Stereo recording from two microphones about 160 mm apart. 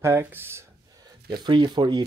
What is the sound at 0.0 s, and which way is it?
Speech, 15° right (ahead or behind).